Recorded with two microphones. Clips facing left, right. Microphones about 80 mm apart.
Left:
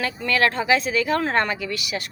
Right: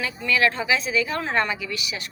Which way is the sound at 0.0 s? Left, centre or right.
Left.